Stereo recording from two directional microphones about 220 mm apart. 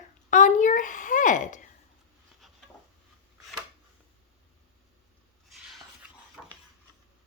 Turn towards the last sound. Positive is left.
turn(degrees=5)  # may be behind; listen again after turning